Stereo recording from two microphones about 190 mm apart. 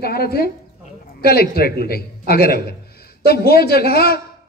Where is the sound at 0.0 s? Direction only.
55° left (ahead or behind).